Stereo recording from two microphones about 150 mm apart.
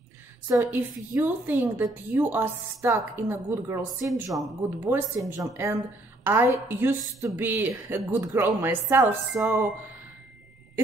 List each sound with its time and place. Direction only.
0.5 s a woman's voice: 20° right (ahead or behind)
4.1 s speech: centre (ahead or behind)
4.9 s a woman's voice: 15° right (ahead or behind)